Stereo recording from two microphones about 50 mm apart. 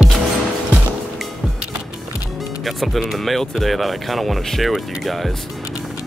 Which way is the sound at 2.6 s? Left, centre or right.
Centre.